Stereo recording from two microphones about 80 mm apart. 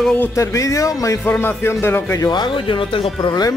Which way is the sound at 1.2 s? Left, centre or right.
Left.